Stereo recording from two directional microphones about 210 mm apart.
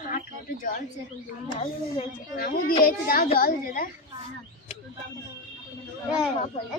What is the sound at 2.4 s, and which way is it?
A woman's voice, 45° left (ahead or behind).